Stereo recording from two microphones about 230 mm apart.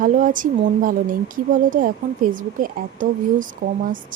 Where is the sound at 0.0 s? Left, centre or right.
Right.